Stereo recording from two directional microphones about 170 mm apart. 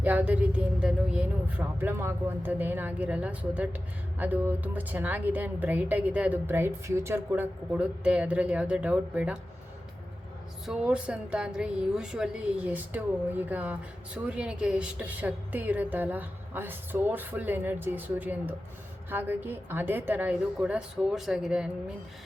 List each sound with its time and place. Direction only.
0.0 s a woman's voice: 10° right (ahead or behind)
10.7 s a woman's voice: 5° right (ahead or behind)